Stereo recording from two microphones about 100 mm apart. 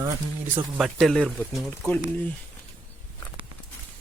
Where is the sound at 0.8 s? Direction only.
Centre (ahead or behind).